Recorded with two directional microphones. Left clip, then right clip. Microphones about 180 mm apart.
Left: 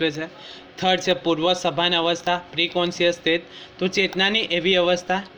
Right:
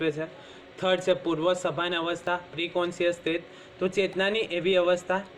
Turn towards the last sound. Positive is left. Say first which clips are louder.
# left 4 dB
turn(degrees=45)  # may be behind; listen again after turning